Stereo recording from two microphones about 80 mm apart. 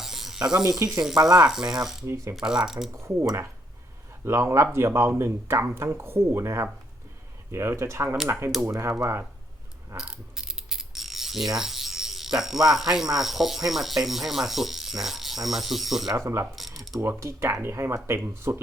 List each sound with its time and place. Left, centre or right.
0.0 s music: centre
1.0 s speech: centre
2.0 s speech: right
2.3 s speech: centre
2.9 s speech: right
10.0 s mechanisms: centre
11.5 s speech: centre
16.1 s speech: right
16.6 s ratchet: centre
17.0 s speech: right